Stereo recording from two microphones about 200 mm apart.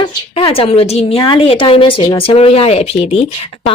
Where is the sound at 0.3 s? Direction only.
25° left (ahead or behind).